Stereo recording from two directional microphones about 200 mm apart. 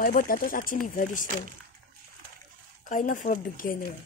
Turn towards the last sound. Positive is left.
turn(degrees=45)  # may be behind; listen again after turning